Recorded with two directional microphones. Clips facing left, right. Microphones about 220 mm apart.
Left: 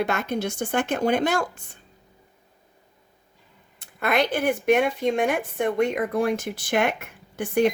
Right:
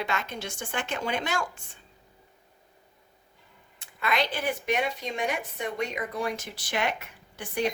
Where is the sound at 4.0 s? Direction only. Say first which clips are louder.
Left 6 dB; 55° left (ahead or behind).